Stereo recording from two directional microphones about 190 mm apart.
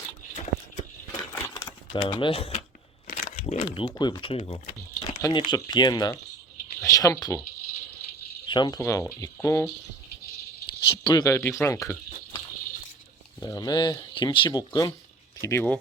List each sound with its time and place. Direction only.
1.3 s a sound: 15° left (ahead or behind)
1.6 s speech: 25° left (ahead or behind)
3.1 s a sound: 45° left (ahead or behind)
3.4 s speech: 35° left (ahead or behind); by 7.4 s 20° left (ahead or behind)
8.4 s speech: 25° left (ahead or behind)
10.7 s speech: 25° left (ahead or behind)
13.4 s speech: 20° left (ahead or behind)